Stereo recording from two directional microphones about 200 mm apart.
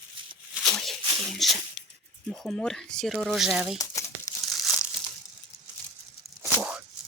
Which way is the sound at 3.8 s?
15° left (ahead or behind).